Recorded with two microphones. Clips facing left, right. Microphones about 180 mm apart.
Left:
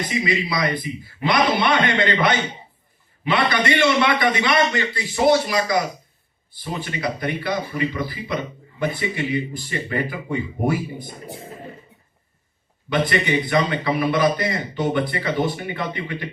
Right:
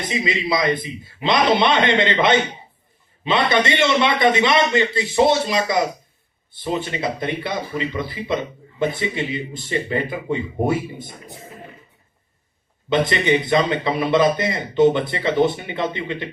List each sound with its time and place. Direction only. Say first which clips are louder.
0.1 s a man's voice: right 4 dB; 25° right (ahead or behind)
12.9 s a man's voice: right 3 dB; 25° right (ahead or behind)